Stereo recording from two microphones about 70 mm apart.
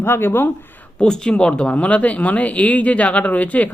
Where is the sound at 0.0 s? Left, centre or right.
Left.